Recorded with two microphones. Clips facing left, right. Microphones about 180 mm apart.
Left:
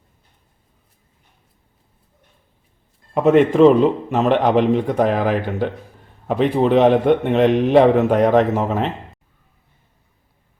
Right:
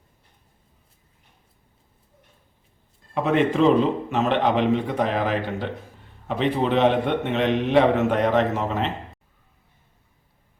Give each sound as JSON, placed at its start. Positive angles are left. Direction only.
{"t": 3.2, "sound": "a man's voice", "side_deg": 45}